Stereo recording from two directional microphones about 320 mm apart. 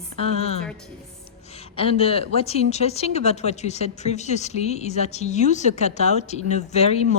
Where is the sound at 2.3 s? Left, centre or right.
Centre.